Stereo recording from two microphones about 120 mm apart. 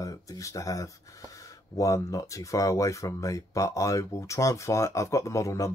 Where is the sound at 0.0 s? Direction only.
25° left (ahead or behind).